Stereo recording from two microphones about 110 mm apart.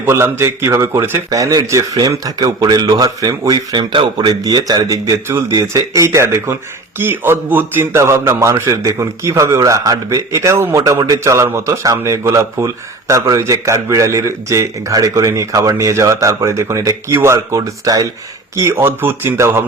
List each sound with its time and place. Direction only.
0.0 s a man's voice: 25° right (ahead or behind)